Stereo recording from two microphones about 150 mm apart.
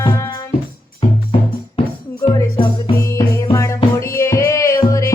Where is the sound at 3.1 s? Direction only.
20° left (ahead or behind).